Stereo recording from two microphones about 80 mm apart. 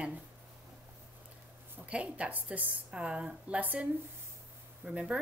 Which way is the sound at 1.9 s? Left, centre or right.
Centre.